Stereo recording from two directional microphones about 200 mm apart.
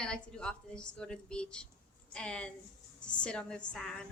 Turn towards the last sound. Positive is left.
turn(degrees=5)  # may be behind; listen again after turning